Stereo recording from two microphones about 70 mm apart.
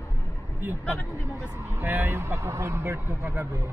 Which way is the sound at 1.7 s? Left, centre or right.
Right.